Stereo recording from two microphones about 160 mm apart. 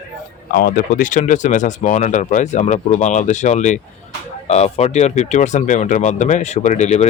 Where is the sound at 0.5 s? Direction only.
60° left (ahead or behind).